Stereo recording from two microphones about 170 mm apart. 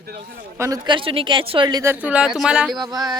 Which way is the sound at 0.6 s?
25° right (ahead or behind).